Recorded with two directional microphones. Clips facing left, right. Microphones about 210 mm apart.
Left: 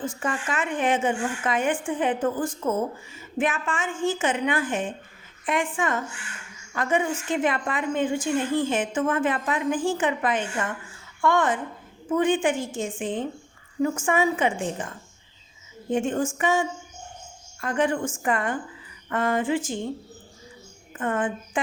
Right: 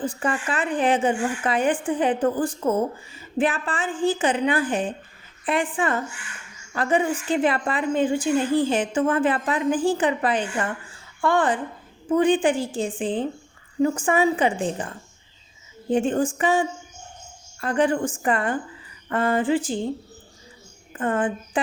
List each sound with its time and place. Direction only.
0.0 s a woman's voice: 35° right (ahead or behind)
21.0 s a woman's voice: 35° right (ahead or behind)